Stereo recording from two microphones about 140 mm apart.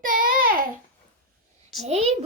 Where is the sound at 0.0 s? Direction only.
85° right.